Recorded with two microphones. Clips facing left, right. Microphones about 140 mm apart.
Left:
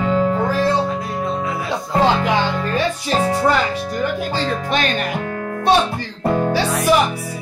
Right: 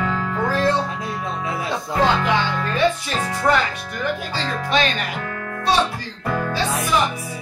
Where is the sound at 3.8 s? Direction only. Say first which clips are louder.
Left 4 dB; 45° left (ahead or behind).